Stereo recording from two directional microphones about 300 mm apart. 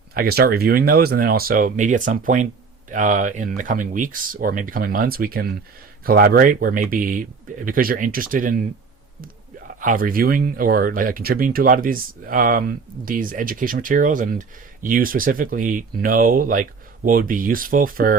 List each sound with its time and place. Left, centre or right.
0.1 s speech: right
9.8 s speech: right